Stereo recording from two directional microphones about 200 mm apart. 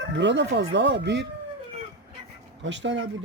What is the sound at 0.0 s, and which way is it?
Speech, 65° right (ahead or behind).